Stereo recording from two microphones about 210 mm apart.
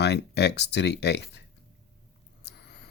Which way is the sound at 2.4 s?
50° left (ahead or behind).